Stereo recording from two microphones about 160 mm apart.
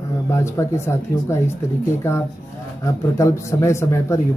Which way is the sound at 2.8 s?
20° left (ahead or behind).